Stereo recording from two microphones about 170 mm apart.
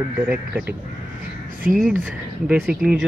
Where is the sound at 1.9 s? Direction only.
10° right (ahead or behind).